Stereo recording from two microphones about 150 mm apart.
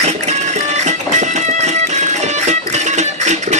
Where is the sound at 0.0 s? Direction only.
45° right (ahead or behind).